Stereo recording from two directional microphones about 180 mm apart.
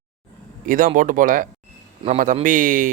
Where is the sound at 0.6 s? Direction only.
50° right (ahead or behind).